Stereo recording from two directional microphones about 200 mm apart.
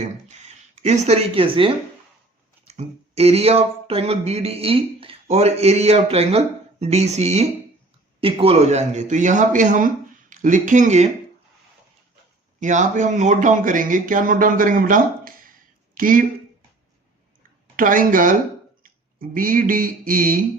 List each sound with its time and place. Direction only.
0.0 s speech: 35° right (ahead or behind)
12.5 s speech: 40° right (ahead or behind)
17.7 s speech: 45° right (ahead or behind)